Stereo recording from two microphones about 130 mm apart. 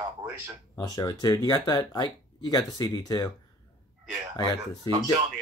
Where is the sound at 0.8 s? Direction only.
25° left (ahead or behind).